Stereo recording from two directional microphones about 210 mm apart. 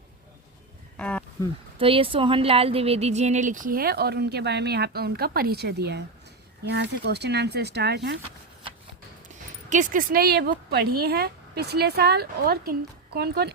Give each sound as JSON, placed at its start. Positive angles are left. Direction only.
{"t": 0.9, "sound": "speech", "side_deg": 5}
{"t": 1.8, "sound": "speech", "side_deg": -25}
{"t": 9.6, "sound": "speech", "side_deg": -40}